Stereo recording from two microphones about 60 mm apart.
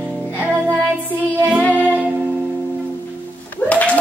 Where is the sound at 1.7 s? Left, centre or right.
Right.